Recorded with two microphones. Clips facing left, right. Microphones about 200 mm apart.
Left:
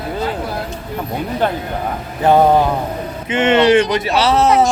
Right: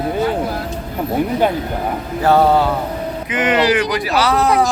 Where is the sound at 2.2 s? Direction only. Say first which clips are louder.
Left 2 dB; 15° left (ahead or behind).